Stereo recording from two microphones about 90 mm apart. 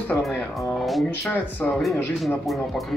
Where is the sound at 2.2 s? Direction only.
Centre (ahead or behind).